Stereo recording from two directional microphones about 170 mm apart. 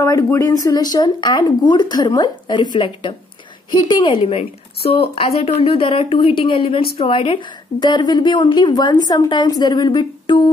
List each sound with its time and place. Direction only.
0.0 s a woman's voice: 15° left (ahead or behind)